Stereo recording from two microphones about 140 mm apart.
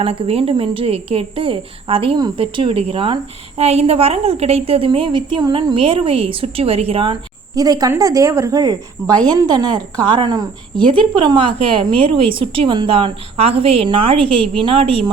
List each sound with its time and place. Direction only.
0.0 s a woman's voice: 45° right (ahead or behind)
7.5 s a woman's voice: 25° right (ahead or behind)